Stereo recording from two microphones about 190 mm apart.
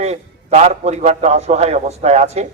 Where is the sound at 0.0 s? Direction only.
35° right (ahead or behind).